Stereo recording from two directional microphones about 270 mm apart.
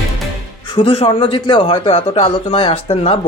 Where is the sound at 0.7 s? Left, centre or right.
Centre.